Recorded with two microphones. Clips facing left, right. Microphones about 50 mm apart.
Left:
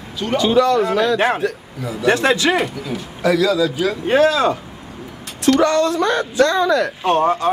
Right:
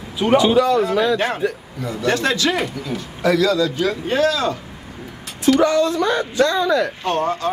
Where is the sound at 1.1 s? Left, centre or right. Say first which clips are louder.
Left 3 dB; centre.